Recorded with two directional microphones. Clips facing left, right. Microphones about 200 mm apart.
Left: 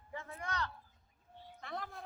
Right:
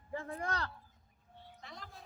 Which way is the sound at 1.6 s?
55° left (ahead or behind).